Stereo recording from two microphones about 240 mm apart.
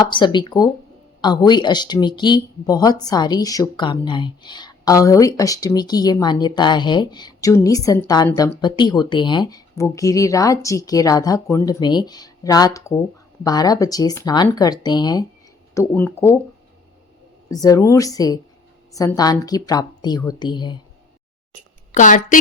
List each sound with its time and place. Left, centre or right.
0.0 s speech: centre
17.5 s speech: centre
21.9 s a woman's voice: left